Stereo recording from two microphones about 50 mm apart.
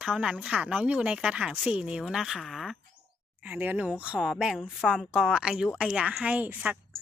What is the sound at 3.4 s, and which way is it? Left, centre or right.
Speech, right.